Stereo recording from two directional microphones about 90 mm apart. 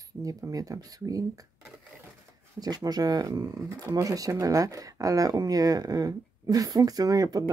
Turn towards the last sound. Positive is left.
turn(degrees=-45)  # may be behind; listen again after turning